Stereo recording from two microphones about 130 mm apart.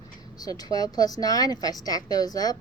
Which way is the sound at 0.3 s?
30° left (ahead or behind).